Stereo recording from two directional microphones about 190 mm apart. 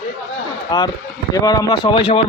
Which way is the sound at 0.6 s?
20° left (ahead or behind).